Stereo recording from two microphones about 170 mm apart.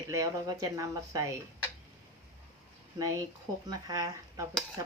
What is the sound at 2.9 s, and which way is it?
Speech, 20° right (ahead or behind).